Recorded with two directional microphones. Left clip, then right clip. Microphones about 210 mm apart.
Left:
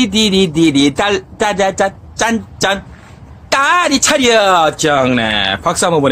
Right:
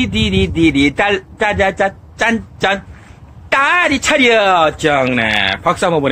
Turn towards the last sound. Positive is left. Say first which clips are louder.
# left 1 dB
turn(degrees=15)  # may be behind; listen again after turning